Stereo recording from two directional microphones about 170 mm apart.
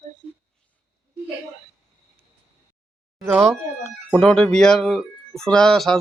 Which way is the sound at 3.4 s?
Centre (ahead or behind).